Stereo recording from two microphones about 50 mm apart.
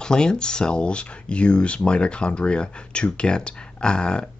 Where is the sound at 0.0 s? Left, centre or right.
Centre.